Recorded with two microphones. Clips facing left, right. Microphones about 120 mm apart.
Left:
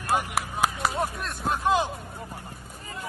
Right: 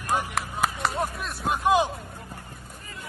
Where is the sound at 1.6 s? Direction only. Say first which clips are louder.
Right 3 dB; 15° right (ahead or behind).